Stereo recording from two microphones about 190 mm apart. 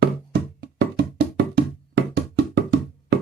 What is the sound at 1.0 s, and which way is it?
Music, 65° right (ahead or behind).